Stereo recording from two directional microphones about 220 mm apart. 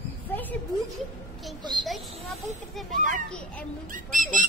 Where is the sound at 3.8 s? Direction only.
40° right (ahead or behind).